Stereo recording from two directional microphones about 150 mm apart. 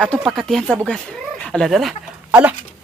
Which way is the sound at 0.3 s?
Centre (ahead or behind).